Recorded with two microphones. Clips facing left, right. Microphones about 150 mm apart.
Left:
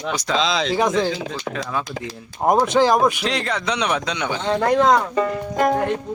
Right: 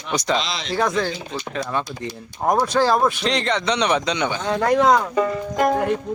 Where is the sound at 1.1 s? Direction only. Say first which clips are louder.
Left 3 dB; 90° left.